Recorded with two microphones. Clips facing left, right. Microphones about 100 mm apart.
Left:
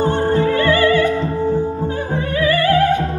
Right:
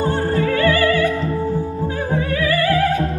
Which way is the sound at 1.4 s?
25° left (ahead or behind).